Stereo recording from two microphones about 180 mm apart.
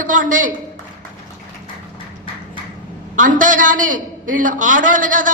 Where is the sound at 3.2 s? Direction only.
45° right (ahead or behind).